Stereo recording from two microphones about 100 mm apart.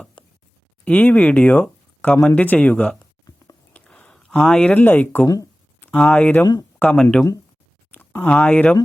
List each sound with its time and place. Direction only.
0.9 s speech: 15° left (ahead or behind)
3.0 s a sound: 35° left (ahead or behind)
3.7 s a sound: 15° left (ahead or behind)
4.7 s speech: 20° left (ahead or behind)
6.4 s speech: 35° left (ahead or behind)
6.9 s speech: 5° left (ahead or behind)
7.9 s speech: 15° left (ahead or behind)